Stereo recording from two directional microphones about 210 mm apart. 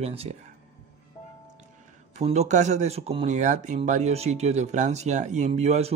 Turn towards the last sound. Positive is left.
turn(degrees=-30)  # may be behind; listen again after turning